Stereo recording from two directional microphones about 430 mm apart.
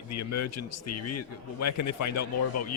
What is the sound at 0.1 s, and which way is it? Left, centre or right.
A man's voice, left.